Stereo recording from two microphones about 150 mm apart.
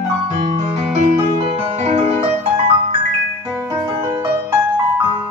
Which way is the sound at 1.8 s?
45° right (ahead or behind).